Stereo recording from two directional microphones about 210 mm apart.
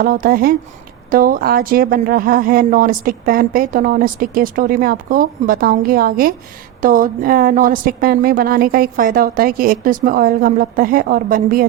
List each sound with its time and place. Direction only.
0.0 s speech: 40° right (ahead or behind)